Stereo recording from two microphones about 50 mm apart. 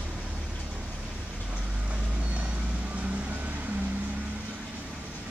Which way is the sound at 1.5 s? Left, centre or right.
Right.